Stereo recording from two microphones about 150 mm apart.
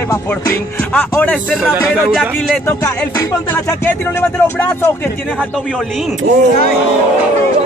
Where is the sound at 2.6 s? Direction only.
20° left (ahead or behind).